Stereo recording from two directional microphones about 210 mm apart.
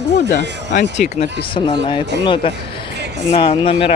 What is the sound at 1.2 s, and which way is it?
Speech, 25° left (ahead or behind).